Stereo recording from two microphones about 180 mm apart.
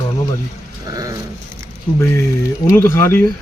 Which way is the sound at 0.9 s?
20° right (ahead or behind).